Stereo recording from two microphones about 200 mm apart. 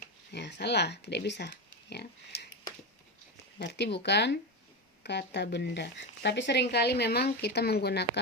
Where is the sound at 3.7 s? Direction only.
60° left (ahead or behind).